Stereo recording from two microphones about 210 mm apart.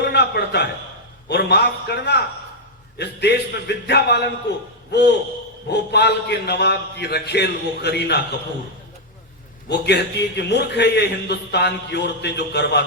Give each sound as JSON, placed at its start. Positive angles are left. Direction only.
{"t": 0.0, "sound": "a sound", "side_deg": 50}
{"t": 1.3, "sound": "a man's voice", "side_deg": 50}
{"t": 9.6, "sound": "a man's voice", "side_deg": 50}